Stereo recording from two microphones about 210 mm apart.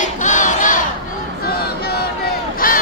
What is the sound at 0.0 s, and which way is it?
Battle cry, 35° left (ahead or behind).